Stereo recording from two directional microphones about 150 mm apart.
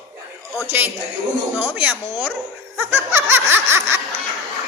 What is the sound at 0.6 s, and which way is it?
A man's voice, 15° right (ahead or behind).